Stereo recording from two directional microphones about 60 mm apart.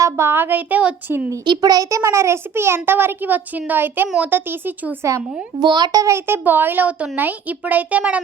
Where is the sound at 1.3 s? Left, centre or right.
Right.